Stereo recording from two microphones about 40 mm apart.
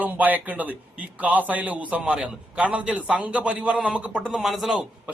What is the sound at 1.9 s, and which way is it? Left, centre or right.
A man's voice, right.